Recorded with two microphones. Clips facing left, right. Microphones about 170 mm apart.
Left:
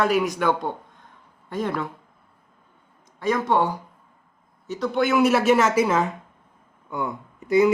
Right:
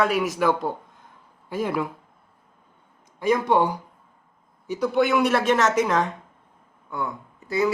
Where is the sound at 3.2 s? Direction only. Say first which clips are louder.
Right 1 dB; 10° right (ahead or behind); by 6.1 s 5° left (ahead or behind).